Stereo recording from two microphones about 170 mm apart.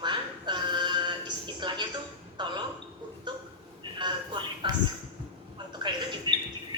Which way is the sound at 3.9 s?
25° right (ahead or behind).